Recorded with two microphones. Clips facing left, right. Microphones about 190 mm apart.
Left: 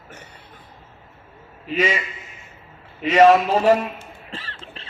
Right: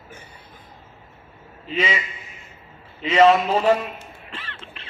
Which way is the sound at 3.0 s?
40° left (ahead or behind).